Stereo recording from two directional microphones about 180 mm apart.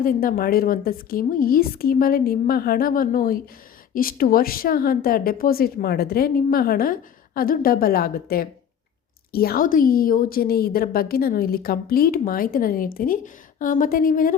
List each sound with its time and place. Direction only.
0.0 s a woman's voice: 50° left (ahead or behind)